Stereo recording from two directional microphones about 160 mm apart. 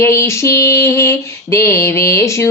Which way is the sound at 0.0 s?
15° left (ahead or behind).